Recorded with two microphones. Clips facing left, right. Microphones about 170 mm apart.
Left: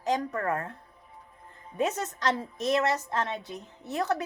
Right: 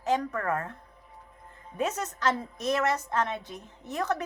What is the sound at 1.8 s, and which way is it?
A woman's voice, 35° left (ahead or behind).